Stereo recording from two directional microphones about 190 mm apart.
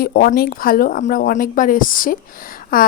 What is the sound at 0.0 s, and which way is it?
A woman's voice, 50° left (ahead or behind).